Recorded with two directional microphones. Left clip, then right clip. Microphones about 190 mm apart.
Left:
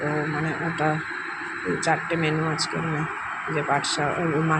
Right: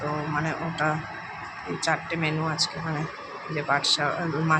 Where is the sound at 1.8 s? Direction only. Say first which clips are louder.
Left 2 dB; 15° left (ahead or behind).